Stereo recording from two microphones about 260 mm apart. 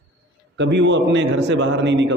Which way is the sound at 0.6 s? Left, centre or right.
Right.